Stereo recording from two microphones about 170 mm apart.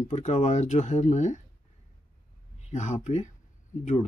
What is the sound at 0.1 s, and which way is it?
Speech, 45° left (ahead or behind).